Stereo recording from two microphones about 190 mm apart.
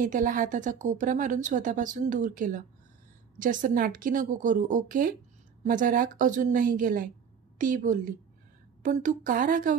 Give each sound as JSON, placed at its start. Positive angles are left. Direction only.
{"t": 0.0, "sound": "speech", "side_deg": -45}